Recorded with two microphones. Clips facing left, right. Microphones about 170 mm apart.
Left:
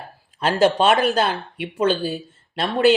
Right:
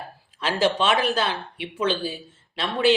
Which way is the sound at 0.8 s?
50° left (ahead or behind).